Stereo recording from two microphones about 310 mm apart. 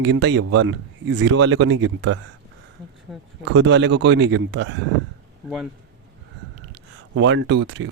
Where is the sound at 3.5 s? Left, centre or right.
Right.